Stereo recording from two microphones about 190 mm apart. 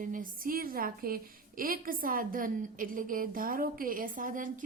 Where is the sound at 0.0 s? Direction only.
45° right (ahead or behind).